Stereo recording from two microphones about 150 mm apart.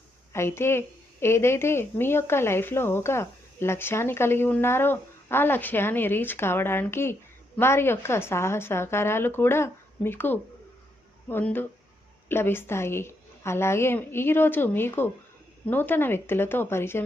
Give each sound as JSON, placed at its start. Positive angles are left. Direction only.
{"t": 0.3, "sound": "a woman's voice", "side_deg": 15}